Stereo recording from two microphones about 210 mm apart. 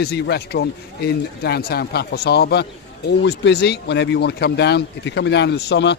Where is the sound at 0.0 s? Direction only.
50° left (ahead or behind).